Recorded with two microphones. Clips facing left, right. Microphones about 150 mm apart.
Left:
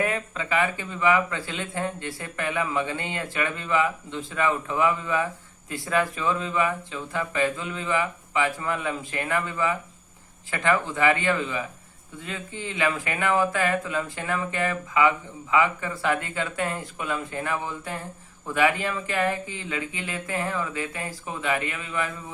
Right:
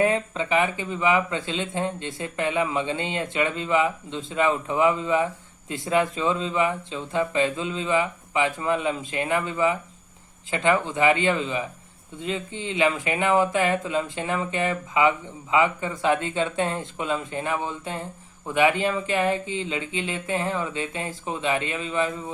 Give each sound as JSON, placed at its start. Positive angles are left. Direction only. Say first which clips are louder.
{"t": 0.0, "sound": "speech", "louder": "right 5 dB", "side_deg": -25}